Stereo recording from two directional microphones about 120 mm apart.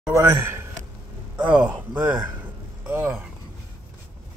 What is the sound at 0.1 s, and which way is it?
Speech, 20° right (ahead or behind).